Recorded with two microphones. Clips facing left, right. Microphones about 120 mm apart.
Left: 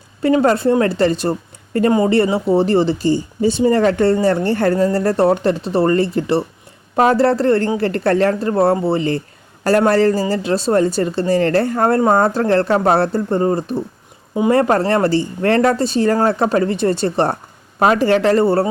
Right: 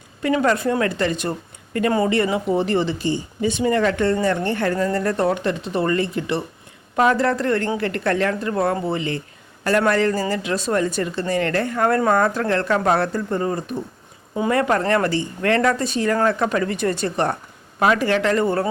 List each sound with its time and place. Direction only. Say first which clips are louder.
0.2 s a woman's voice: left 5 dB; 35° left (ahead or behind)